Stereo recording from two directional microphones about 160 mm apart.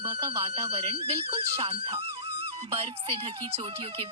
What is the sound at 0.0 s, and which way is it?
Speech, 35° right (ahead or behind).